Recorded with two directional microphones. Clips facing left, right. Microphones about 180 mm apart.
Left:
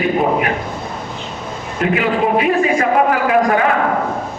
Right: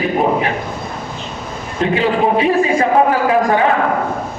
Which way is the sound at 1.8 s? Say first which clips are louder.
Right 1 dB; 30° right (ahead or behind).